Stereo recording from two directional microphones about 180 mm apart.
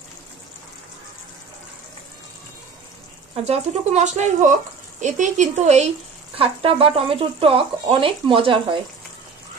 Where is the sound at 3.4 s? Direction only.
35° right (ahead or behind).